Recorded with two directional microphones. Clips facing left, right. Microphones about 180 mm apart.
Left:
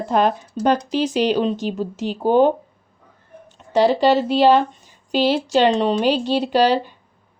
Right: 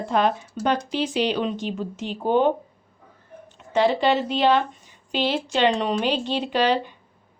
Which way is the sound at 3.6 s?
35° left (ahead or behind).